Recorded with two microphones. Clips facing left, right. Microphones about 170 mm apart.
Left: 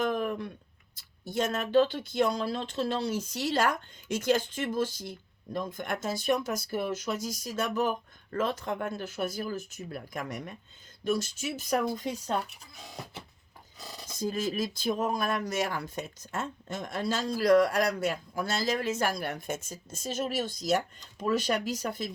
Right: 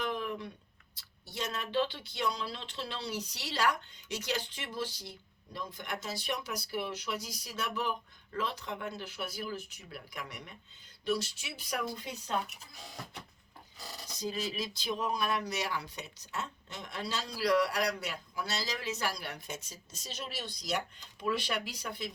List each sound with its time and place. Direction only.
0.0 s a sound: 45° left (ahead or behind)
0.9 s speech: 50° left (ahead or behind)
14.2 s speech: 50° left (ahead or behind)